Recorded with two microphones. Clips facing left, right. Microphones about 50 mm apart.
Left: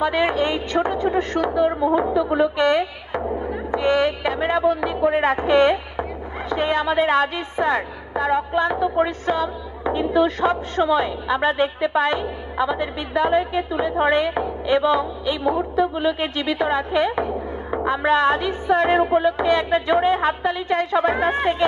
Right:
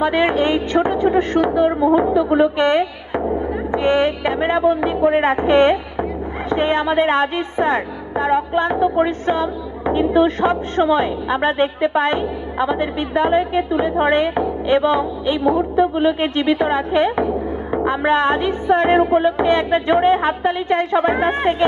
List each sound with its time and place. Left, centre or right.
0.0 s a woman's voice: right